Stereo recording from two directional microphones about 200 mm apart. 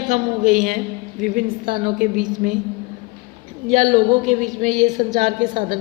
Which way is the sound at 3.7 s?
40° right (ahead or behind).